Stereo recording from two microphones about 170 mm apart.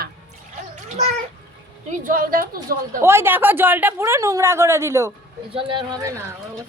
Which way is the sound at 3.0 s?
15° right (ahead or behind).